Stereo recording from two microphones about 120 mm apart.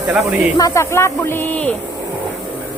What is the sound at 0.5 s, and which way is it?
Speech, 25° left (ahead or behind).